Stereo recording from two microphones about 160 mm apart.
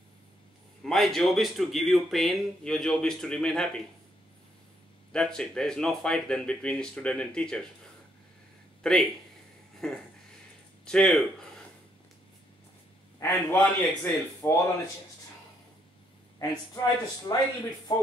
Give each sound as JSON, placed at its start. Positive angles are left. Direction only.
{"t": 0.8, "sound": "speech", "side_deg": 0}
{"t": 5.1, "sound": "speech", "side_deg": 5}
{"t": 8.8, "sound": "speech", "side_deg": 0}
{"t": 13.2, "sound": "a man's voice", "side_deg": 15}
{"t": 16.3, "sound": "speech", "side_deg": 20}